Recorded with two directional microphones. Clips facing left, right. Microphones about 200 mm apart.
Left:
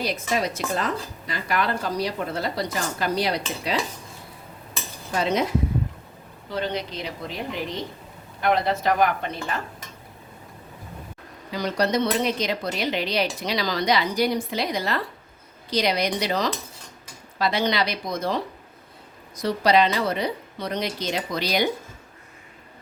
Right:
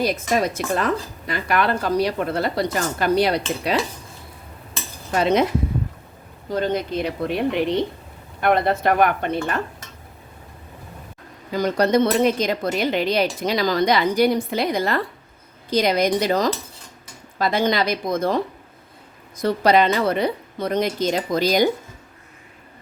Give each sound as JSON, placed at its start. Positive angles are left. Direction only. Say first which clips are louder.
{"t": 0.0, "sound": "speech", "louder": "right 5 dB", "side_deg": -50}
{"t": 5.1, "sound": "speech", "louder": "right 5 dB", "side_deg": -65}
{"t": 6.5, "sound": "speech", "louder": "right 6 dB", "side_deg": -45}
{"t": 8.4, "sound": "speech", "louder": "right 3 dB", "side_deg": -55}
{"t": 11.5, "sound": "speech", "louder": "right 5 dB", "side_deg": -50}